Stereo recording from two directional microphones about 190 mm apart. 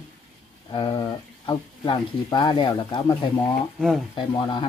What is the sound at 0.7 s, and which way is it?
Speech, 25° left (ahead or behind).